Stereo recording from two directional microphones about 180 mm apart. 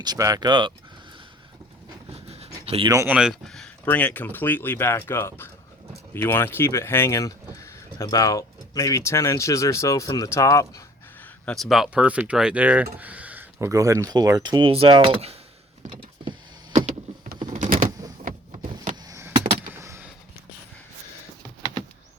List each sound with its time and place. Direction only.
0.0 s speech: 20° right (ahead or behind)
2.6 s speech: 30° right (ahead or behind)
2.9 s speech: 15° right (ahead or behind)
3.2 s speech: centre (ahead or behind); by 15.4 s 30° right (ahead or behind)
15.9 s power windows: 30° right (ahead or behind)
17.2 s power windows: 45° right (ahead or behind)
19.0 s a sound: 20° right (ahead or behind)